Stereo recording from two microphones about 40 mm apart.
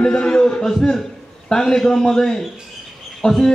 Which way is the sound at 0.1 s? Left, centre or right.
Left.